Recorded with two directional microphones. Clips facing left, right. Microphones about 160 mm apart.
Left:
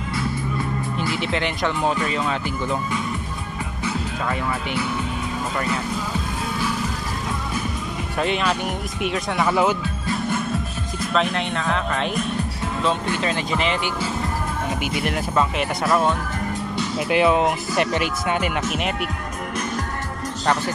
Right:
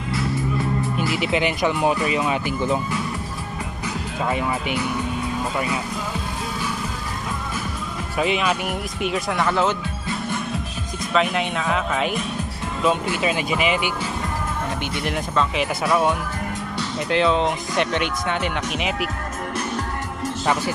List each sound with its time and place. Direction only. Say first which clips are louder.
1.1 s speech: right 3 dB; 10° right (ahead or behind)
4.3 s speech: right 3 dB; 15° right (ahead or behind)
8.2 s speech: right 1 dB; 5° right (ahead or behind)
11.1 s speech: right 2 dB; 5° right (ahead or behind)
15.0 s speech: left 1 dB; centre (ahead or behind)
17.1 s speech: left 1 dB; 10° left (ahead or behind)